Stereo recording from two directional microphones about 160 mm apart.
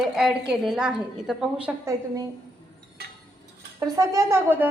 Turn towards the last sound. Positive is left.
turn(degrees=-15)  # may be behind; listen again after turning